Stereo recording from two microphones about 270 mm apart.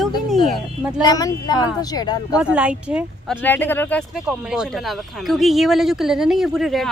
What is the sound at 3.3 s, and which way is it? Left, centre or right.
Speech, centre.